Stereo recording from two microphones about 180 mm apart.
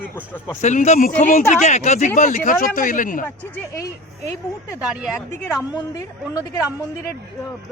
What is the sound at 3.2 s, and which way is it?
A man's voice, 10° left (ahead or behind).